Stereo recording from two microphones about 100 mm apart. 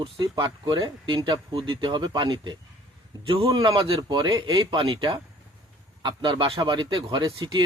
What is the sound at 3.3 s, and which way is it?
Speech, 65° right (ahead or behind).